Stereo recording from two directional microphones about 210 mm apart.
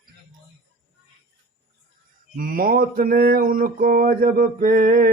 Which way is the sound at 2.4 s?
45° right (ahead or behind).